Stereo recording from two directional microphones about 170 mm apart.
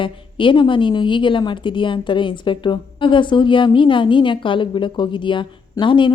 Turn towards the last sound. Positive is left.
turn(degrees=30)  # may be behind; listen again after turning